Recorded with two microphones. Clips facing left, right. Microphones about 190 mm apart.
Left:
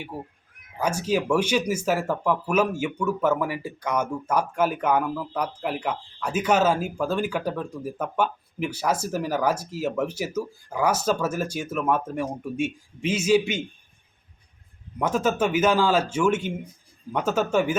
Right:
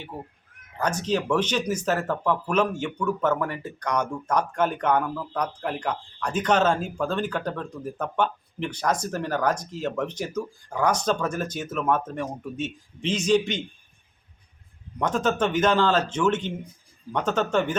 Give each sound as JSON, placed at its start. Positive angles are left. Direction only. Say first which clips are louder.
{"t": 0.1, "sound": "speech", "louder": "left 2 dB", "side_deg": 10}
{"t": 14.9, "sound": "speech", "louder": "left 1 dB", "side_deg": 10}